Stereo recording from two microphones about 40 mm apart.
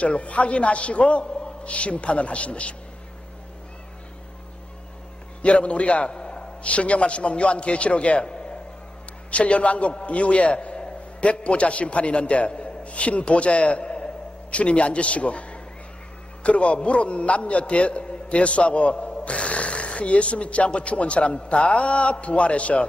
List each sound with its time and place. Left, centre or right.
0.0 s a man's voice: left
5.4 s a man's voice: left